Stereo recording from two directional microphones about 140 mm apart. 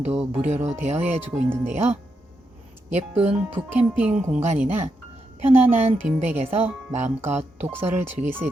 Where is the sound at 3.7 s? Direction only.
10° right (ahead or behind).